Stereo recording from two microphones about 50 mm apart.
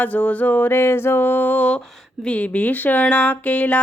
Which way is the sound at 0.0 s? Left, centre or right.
Left.